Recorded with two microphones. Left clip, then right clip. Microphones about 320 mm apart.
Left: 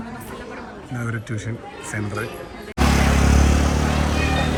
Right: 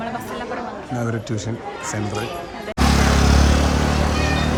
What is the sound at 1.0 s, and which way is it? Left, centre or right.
Speech, centre.